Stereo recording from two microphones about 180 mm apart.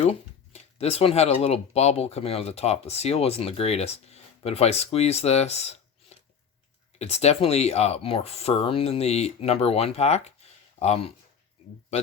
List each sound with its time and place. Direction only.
0.1 s speech: 35° left (ahead or behind)